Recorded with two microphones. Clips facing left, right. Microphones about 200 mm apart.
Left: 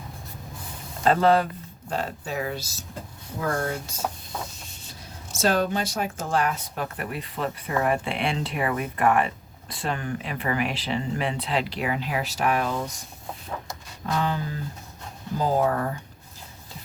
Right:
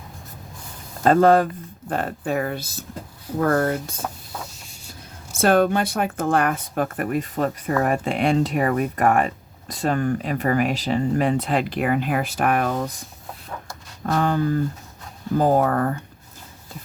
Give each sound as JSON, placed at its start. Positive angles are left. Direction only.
{"t": 1.0, "sound": "speech", "side_deg": -45}
{"t": 5.4, "sound": "speech", "side_deg": -55}
{"t": 14.1, "sound": "speech", "side_deg": -50}